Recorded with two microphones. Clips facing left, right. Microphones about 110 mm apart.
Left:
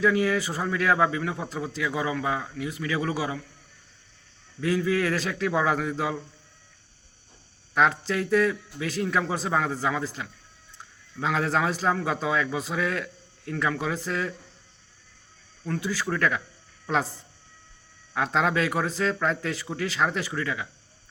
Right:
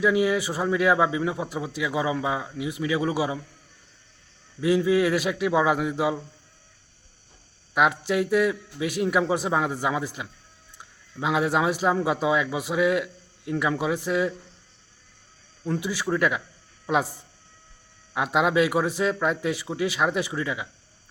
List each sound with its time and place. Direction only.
0.0 s speech: 15° right (ahead or behind)
4.6 s speech: 15° right (ahead or behind)
7.7 s speech: 15° right (ahead or behind)
15.6 s speech: 20° right (ahead or behind)